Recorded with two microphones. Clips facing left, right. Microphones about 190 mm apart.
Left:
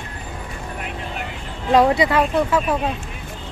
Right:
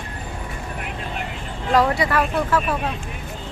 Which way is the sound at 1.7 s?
20° left (ahead or behind).